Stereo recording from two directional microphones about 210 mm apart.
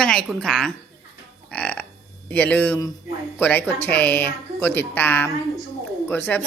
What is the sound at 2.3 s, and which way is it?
A woman's voice, 10° left (ahead or behind).